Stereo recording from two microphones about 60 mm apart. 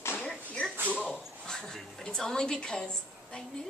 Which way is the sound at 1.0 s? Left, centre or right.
Centre.